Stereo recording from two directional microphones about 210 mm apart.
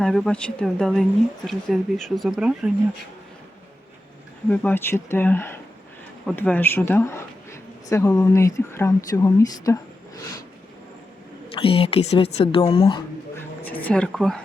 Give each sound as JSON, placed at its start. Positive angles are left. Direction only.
{"t": 0.0, "sound": "speech", "side_deg": 5}
{"t": 4.4, "sound": "speech", "side_deg": 5}
{"t": 11.5, "sound": "speech", "side_deg": 25}